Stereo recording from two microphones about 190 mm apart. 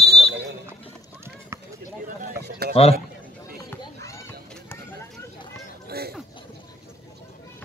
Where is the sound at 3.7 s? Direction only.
15° left (ahead or behind).